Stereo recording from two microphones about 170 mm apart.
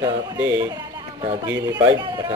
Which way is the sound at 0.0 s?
15° right (ahead or behind).